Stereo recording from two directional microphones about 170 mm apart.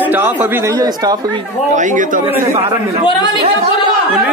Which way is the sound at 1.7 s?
50° right (ahead or behind).